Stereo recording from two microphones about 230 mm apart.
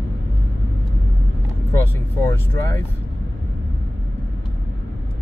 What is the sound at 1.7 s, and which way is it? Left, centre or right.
Speech, centre.